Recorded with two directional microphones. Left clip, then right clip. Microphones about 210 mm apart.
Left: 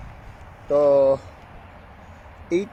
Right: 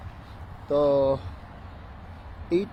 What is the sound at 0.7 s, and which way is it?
Speech, 50° left (ahead or behind).